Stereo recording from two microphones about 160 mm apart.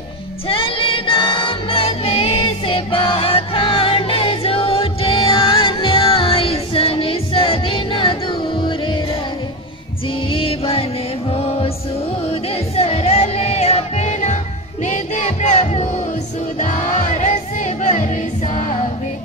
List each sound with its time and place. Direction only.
0.5 s music: 35° left (ahead or behind)
10.3 s music: 35° left (ahead or behind)
12.3 s music: 40° left (ahead or behind)